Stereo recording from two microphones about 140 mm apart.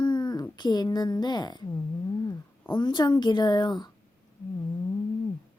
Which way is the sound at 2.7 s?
30° left (ahead or behind).